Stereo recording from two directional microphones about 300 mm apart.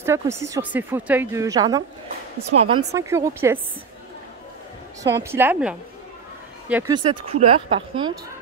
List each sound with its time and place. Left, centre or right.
0.0 s speech: centre
5.0 s speech: centre